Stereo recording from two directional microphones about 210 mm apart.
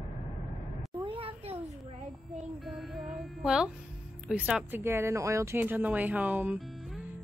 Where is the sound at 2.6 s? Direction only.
Centre (ahead or behind).